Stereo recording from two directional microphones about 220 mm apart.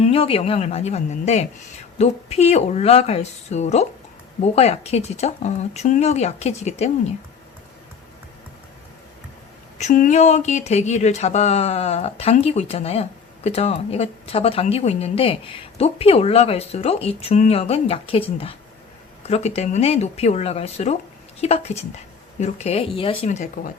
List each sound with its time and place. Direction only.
0.0 s speech: 25° left (ahead or behind)
9.7 s speech: 35° left (ahead or behind)